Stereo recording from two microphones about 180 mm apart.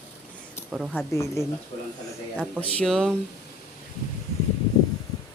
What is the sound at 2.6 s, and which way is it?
Speech, 5° left (ahead or behind).